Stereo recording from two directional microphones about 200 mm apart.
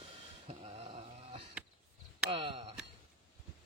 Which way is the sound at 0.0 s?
30° right (ahead or behind).